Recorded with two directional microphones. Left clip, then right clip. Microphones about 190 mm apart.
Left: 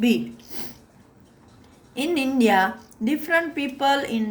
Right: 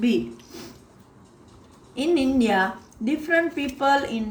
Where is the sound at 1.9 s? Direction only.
50° left (ahead or behind).